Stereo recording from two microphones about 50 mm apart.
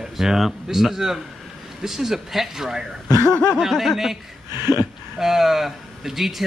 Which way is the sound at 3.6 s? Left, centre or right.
Centre.